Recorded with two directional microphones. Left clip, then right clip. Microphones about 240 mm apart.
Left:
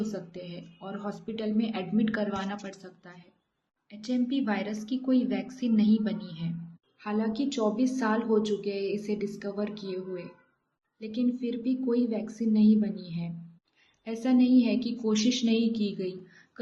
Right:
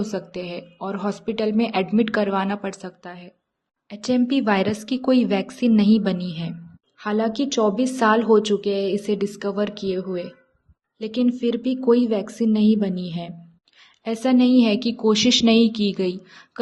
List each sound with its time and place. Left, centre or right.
0.0 s a woman's voice: right